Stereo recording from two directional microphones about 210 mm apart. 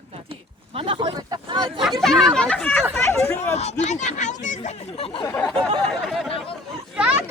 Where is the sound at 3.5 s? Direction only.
30° left (ahead or behind).